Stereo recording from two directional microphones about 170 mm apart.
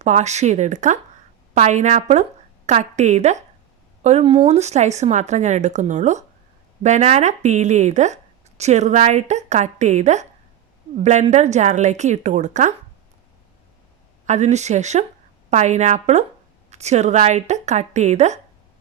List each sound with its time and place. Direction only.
0.0 s a woman's voice: 40° right (ahead or behind)
14.3 s a woman's voice: 45° right (ahead or behind)